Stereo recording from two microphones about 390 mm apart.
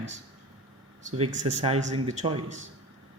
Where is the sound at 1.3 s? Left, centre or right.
Right.